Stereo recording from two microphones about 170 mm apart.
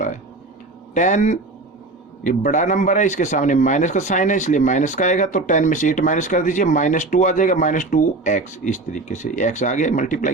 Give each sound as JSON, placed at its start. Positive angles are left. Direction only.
{"t": 0.9, "sound": "speech", "side_deg": 45}